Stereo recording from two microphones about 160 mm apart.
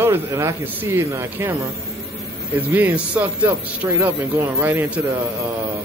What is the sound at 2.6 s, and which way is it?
Speech, 10° right (ahead or behind).